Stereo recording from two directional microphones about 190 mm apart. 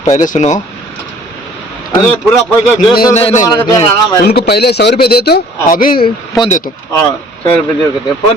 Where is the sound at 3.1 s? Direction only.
35° left (ahead or behind).